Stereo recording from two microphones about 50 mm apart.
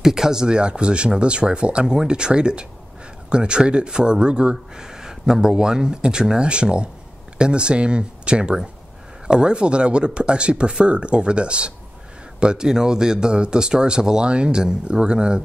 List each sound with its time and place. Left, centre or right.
0.0 s speech: centre